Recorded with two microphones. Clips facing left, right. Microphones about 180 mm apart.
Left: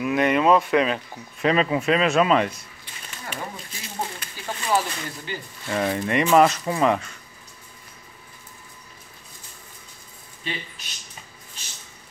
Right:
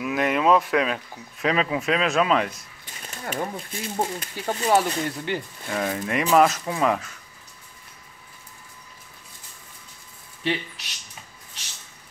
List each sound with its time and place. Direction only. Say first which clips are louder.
0.0 s speech: left 2 dB; centre (ahead or behind)
2.8 s speech: right 4 dB; 45° right (ahead or behind)
5.3 s speech: right 5 dB; 65° right (ahead or behind)
5.7 s speech: left 3 dB; centre (ahead or behind)
10.4 s speech: right 7 dB; 75° right (ahead or behind)